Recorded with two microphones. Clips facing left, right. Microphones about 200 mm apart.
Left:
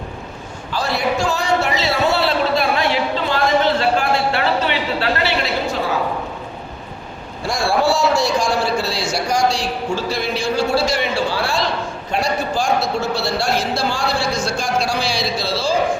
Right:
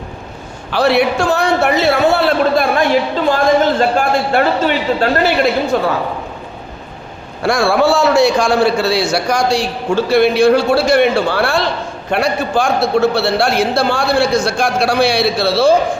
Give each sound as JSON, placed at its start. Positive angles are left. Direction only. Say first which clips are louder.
{"t": 0.7, "sound": "a man's voice", "louder": "right 8 dB", "side_deg": -65}
{"t": 7.4, "sound": "a man's voice", "louder": "right 5 dB", "side_deg": -65}